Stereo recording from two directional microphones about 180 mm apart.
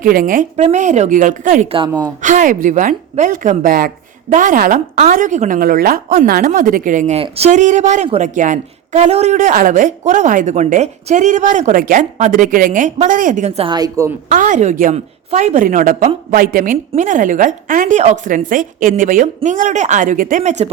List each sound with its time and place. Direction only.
0.0 s a woman's voice: 50° right (ahead or behind); by 13.7 s 35° right (ahead or behind)
13.7 s a woman's voice: 20° right (ahead or behind)
14.3 s a woman's voice: 45° right (ahead or behind)